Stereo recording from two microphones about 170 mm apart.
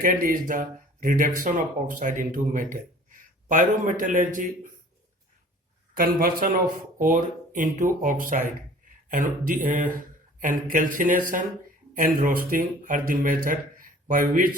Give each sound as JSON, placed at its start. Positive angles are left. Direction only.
{"t": 0.0, "sound": "speech", "side_deg": -55}
{"t": 5.9, "sound": "speech", "side_deg": -60}